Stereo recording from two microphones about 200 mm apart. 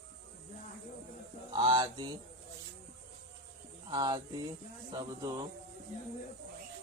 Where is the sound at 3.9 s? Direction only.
20° right (ahead or behind).